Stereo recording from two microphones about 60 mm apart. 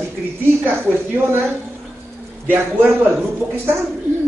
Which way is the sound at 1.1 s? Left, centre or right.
Right.